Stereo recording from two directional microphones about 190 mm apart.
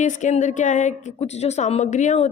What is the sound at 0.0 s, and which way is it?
A woman's voice, 40° left (ahead or behind).